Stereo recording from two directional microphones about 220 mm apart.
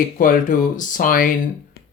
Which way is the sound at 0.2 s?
35° left (ahead or behind).